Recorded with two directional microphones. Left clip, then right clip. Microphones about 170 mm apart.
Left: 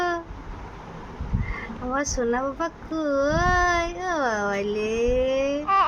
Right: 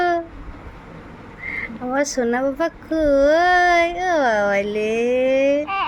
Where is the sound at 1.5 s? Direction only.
25° right (ahead or behind).